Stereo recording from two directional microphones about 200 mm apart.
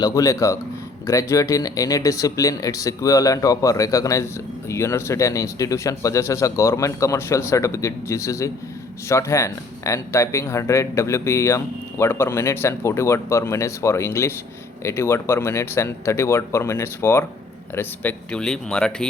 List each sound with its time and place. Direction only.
0.0 s speech: 15° left (ahead or behind)